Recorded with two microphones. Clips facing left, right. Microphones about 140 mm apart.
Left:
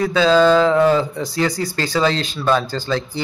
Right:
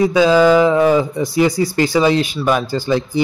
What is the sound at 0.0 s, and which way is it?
Speech, 15° right (ahead or behind).